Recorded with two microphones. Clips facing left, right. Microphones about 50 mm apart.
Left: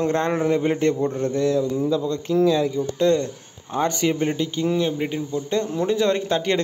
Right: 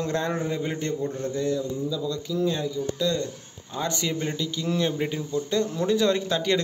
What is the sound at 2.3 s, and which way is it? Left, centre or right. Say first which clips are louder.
Speech: left 9 dB; left.